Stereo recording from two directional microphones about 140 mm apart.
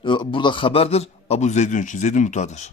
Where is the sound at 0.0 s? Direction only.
35° left (ahead or behind); by 2.7 s 55° left (ahead or behind).